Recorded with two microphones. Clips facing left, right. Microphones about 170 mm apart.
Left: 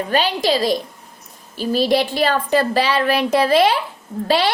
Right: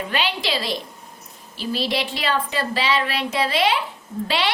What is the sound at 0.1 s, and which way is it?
A woman's voice, 40° left (ahead or behind).